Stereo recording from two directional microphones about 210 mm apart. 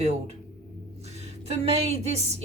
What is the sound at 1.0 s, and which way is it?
Speech, 30° right (ahead or behind).